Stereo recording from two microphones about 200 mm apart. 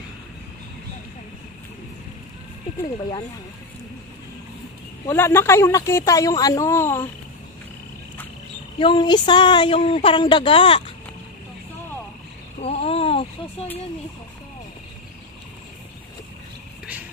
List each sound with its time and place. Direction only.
5.0 s speech: 10° left (ahead or behind)
8.7 s speech: 25° left (ahead or behind)
12.5 s a sound: 30° left (ahead or behind)